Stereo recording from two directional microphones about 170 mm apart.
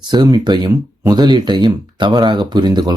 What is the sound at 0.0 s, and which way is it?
Speech, 25° right (ahead or behind).